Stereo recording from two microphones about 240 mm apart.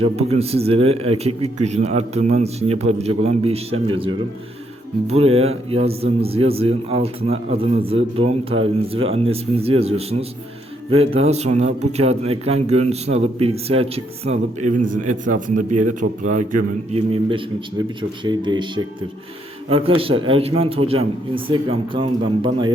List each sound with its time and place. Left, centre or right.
0.0 s a man's voice: right